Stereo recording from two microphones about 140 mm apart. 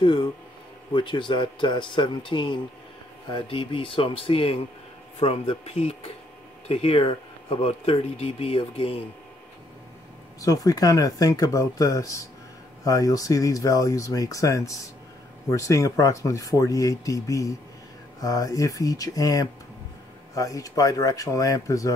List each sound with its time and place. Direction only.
0.0 s speech: 35° left (ahead or behind)
10.4 s speech: 25° left (ahead or behind)